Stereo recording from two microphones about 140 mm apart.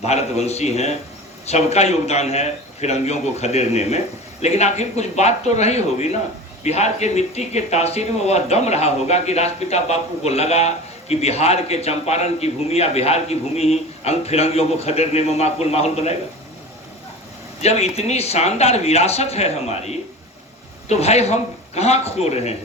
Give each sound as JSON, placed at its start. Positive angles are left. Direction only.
{"t": 0.0, "sound": "speech", "side_deg": 50}
{"t": 17.6, "sound": "speech", "side_deg": 50}